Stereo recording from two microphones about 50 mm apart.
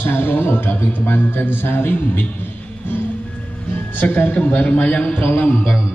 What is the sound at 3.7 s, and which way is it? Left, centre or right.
A man's voice, left.